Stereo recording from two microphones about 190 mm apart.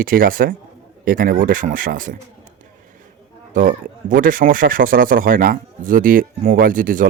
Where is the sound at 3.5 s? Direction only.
45° right (ahead or behind).